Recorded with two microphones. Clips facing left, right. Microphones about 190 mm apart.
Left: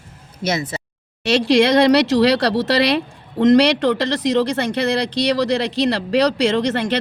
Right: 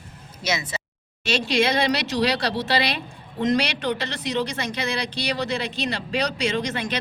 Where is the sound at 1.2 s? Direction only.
75° left (ahead or behind).